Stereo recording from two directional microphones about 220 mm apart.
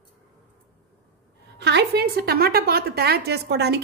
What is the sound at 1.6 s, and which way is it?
A woman's voice, 50° right (ahead or behind).